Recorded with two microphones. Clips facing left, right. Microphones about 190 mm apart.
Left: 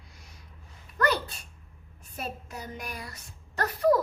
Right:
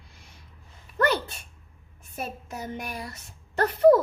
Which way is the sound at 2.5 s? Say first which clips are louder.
Right 4 dB; 25° right (ahead or behind).